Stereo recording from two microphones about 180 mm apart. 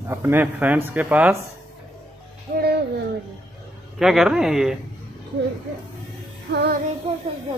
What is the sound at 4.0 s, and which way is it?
Speech, 5° right (ahead or behind).